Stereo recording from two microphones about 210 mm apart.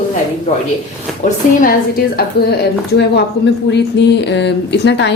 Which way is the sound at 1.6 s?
45° left (ahead or behind).